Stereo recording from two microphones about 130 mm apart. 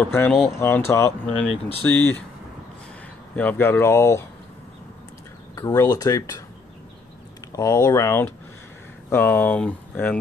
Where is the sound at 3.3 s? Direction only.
15° left (ahead or behind).